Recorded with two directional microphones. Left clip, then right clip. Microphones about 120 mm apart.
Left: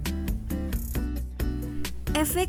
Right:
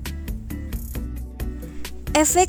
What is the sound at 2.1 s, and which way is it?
Speech, 40° right (ahead or behind).